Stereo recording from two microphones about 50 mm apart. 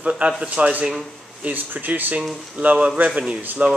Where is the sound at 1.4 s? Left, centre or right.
Right.